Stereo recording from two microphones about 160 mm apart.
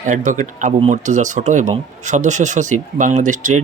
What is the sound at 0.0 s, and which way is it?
A man's voice, 50° right (ahead or behind).